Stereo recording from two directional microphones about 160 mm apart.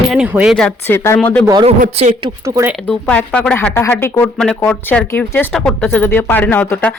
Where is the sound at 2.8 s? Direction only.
10° left (ahead or behind).